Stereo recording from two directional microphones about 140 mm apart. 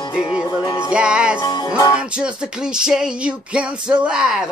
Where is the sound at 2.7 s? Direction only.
5° right (ahead or behind).